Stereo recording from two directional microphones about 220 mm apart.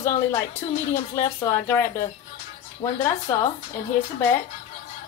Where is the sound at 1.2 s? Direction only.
10° left (ahead or behind).